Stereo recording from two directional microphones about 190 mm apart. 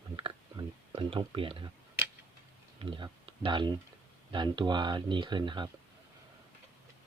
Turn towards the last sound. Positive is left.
turn(degrees=-25)  # may be behind; listen again after turning